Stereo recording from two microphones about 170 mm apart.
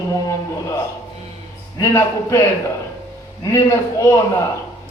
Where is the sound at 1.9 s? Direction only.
15° left (ahead or behind).